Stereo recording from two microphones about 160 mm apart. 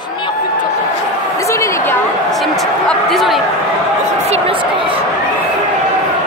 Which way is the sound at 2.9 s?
Centre (ahead or behind).